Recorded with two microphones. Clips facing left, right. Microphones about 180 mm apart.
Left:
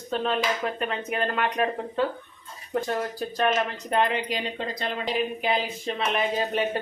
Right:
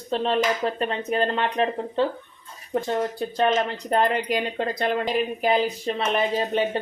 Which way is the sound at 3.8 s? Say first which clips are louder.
Right 3 dB; 40° right (ahead or behind).